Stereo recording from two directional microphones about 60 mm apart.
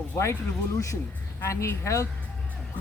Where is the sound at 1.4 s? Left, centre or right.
Left.